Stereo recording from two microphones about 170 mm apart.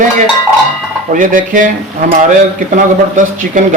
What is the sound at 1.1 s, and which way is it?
A man's voice, 50° right (ahead or behind).